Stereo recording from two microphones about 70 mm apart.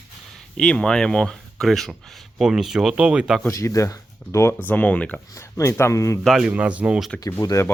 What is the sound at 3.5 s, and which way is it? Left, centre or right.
Speech, left.